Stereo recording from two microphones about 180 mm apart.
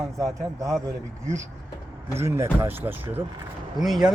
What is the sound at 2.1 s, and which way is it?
Speech, 15° right (ahead or behind).